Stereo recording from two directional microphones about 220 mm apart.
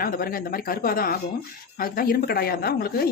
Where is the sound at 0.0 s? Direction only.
40° left (ahead or behind).